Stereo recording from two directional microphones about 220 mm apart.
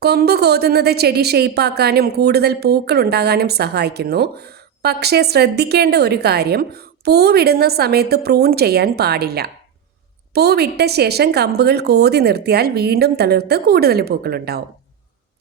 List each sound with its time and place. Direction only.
0.0 s a woman's voice: 45° right (ahead or behind)